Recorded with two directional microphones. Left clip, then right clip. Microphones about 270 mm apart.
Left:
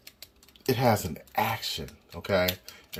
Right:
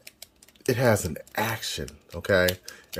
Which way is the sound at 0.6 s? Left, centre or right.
Centre.